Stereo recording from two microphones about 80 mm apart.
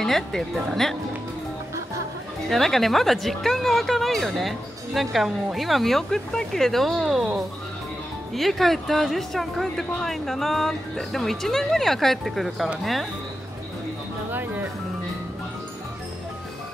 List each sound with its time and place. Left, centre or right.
0.0 s speech: centre
2.5 s speech: centre
14.3 s music: right